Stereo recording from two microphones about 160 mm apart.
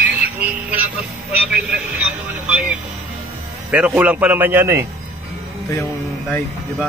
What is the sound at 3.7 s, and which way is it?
A man's voice, 10° right (ahead or behind).